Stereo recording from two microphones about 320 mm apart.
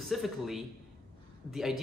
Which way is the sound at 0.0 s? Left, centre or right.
Centre.